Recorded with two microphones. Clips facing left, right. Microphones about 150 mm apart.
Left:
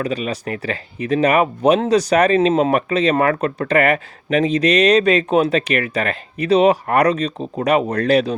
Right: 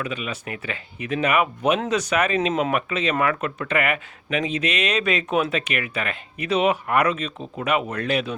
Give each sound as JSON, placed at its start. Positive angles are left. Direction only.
{"t": 0.0, "sound": "speech", "side_deg": 35}